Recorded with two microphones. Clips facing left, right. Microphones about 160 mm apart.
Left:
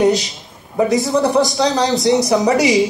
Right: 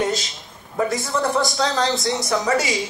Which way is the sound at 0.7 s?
20° left (ahead or behind).